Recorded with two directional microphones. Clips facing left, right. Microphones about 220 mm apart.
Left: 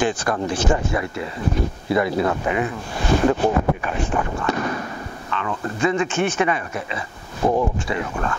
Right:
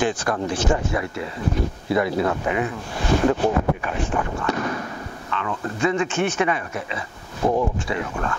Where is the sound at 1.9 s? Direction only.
15° left (ahead or behind).